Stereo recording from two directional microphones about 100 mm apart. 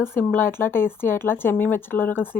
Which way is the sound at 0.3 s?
20° left (ahead or behind).